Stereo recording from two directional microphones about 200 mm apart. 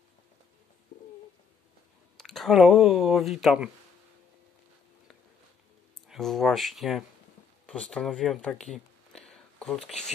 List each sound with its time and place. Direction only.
0.9 s bird: 50° left (ahead or behind)
2.1 s speech: centre (ahead or behind)
6.0 s speech: centre (ahead or behind)